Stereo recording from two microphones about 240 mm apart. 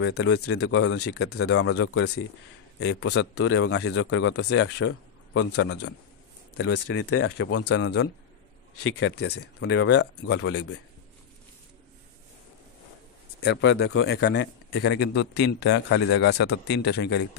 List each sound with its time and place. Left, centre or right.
0.0 s a man's voice: left
1.3 s a man's voice: left
6.9 s speech: left
9.6 s a man's voice: left
13.4 s a man's voice: left